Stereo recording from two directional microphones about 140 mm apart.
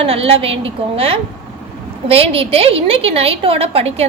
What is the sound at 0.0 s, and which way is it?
A woman's voice, 45° right (ahead or behind).